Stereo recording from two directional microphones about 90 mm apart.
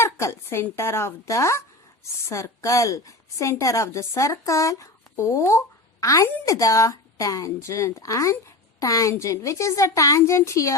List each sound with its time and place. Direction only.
0.0 s a woman's voice: 30° left (ahead or behind)